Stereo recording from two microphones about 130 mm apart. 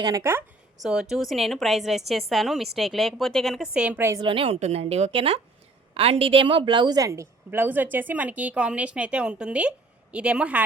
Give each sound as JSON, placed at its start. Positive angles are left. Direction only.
{"t": 0.0, "sound": "a woman's voice", "side_deg": -25}
{"t": 0.8, "sound": "a woman's voice", "side_deg": -5}
{"t": 3.9, "sound": "a woman's voice", "side_deg": -20}
{"t": 4.2, "sound": "a woman's voice", "side_deg": -45}